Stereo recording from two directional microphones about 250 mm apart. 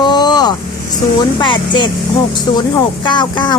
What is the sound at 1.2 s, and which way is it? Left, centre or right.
A woman's voice, centre.